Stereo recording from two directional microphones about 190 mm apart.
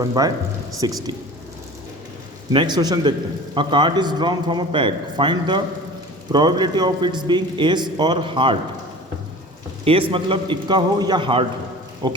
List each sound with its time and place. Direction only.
0.0 s a man's voice: 20° right (ahead or behind)
2.5 s a man's voice: 25° right (ahead or behind)
10.1 s a man's voice: 25° right (ahead or behind)